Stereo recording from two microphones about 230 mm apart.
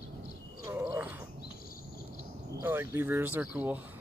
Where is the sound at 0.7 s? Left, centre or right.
Centre.